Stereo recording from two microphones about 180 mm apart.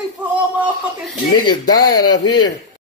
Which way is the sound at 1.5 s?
20° left (ahead or behind).